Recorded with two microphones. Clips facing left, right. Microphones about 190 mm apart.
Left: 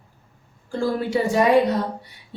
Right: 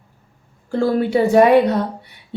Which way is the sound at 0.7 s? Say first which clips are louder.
Right 5 dB; 60° right (ahead or behind).